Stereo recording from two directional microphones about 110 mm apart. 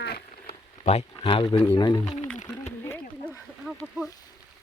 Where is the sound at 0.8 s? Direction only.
65° left (ahead or behind).